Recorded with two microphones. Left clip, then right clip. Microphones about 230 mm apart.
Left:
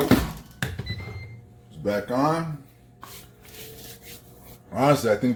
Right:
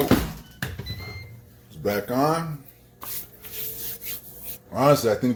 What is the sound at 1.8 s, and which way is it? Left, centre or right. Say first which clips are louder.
Speech: right 1 dB; right.